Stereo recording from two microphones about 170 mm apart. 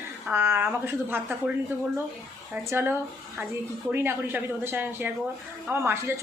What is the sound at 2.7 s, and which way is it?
A woman's voice, 15° right (ahead or behind).